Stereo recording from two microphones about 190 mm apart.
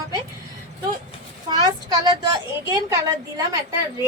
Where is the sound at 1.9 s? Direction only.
20° right (ahead or behind).